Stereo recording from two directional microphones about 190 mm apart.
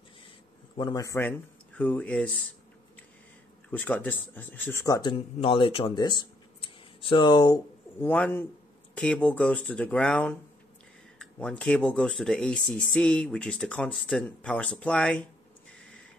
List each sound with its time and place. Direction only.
0.7 s speech: 20° left (ahead or behind); by 2.4 s 5° left (ahead or behind)
3.7 s speech: 5° left (ahead or behind)